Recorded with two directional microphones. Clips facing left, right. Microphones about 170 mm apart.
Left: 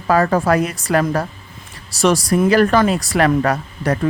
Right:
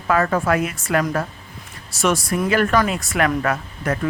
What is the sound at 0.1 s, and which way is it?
Speech, 35° left (ahead or behind).